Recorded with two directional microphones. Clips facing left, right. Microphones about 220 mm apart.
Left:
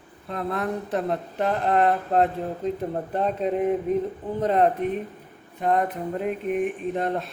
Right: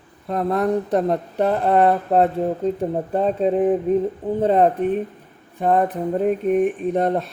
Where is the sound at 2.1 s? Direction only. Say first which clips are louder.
Right 5 dB; 35° right (ahead or behind).